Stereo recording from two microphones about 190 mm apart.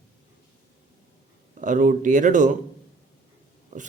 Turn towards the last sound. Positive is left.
turn(degrees=-45)  # may be behind; listen again after turning